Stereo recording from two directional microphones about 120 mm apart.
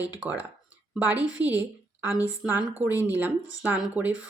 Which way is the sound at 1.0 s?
15° right (ahead or behind).